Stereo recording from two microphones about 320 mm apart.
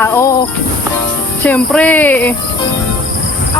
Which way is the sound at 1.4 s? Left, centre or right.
Centre.